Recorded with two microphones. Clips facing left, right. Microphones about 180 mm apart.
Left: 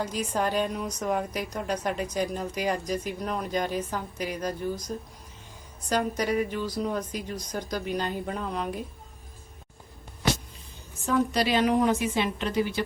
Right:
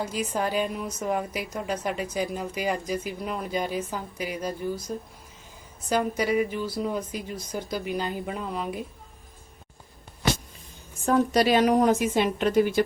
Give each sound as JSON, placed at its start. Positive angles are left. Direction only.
{"t": 0.0, "sound": "a woman's voice", "side_deg": -10}
{"t": 11.0, "sound": "a woman's voice", "side_deg": -45}